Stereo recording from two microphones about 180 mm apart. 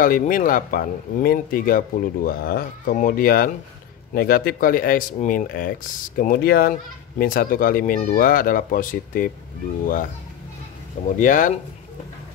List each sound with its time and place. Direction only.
0.0 s speech: 50° left (ahead or behind)
11.1 s speech: 45° left (ahead or behind)